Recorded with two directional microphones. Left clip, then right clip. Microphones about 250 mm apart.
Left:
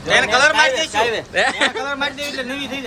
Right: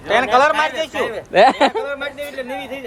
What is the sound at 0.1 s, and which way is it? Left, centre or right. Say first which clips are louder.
Speech: even; right.